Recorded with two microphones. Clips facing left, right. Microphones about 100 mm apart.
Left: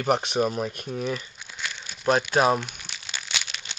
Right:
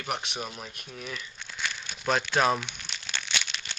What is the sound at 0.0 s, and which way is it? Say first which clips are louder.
Speech: left 11 dB; 40° left (ahead or behind).